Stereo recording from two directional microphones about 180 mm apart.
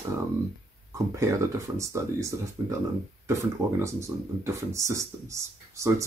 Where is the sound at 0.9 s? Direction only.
15° right (ahead or behind).